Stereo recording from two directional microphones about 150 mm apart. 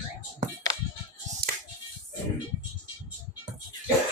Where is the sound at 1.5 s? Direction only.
70° right (ahead or behind).